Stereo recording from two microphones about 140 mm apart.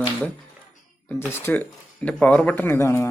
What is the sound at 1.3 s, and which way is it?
A man's voice, 15° left (ahead or behind).